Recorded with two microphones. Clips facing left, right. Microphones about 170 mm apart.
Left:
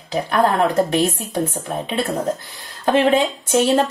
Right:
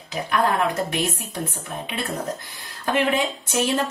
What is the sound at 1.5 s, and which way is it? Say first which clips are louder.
Speech: left 7 dB; 30° left (ahead or behind).